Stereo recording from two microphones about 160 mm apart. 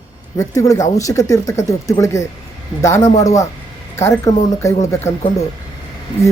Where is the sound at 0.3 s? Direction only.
20° left (ahead or behind).